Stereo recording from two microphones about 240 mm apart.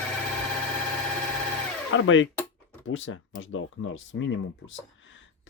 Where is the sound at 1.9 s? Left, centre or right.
Left.